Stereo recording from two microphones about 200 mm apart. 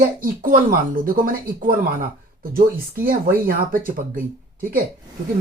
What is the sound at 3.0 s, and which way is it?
Speech, 45° right (ahead or behind).